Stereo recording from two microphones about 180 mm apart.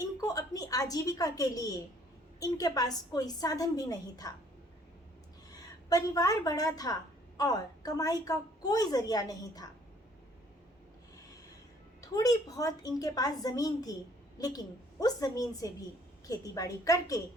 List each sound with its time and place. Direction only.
0.0 s a sound: 20° left (ahead or behind)
2.4 s a woman's voice: 20° left (ahead or behind)
5.5 s a woman's voice: 20° left (ahead or behind)
11.9 s a woman's voice: 20° left (ahead or behind)